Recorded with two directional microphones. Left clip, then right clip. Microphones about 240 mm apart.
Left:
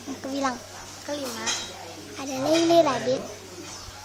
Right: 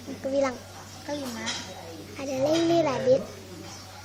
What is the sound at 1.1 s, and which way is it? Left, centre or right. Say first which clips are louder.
Speech: left 1 dB; centre.